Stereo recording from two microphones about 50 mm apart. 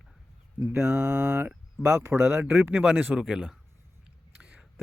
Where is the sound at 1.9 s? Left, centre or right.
Right.